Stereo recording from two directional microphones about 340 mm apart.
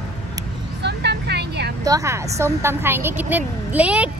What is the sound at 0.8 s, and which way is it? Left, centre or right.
Vehicle, right.